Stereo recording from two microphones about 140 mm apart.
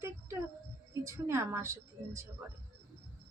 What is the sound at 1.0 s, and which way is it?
Speech, 20° right (ahead or behind).